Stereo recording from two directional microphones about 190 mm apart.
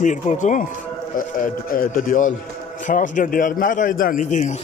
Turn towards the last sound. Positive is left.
turn(degrees=40)  # may be behind; listen again after turning